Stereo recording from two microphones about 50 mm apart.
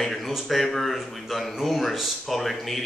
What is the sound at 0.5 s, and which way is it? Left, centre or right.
Speech, centre.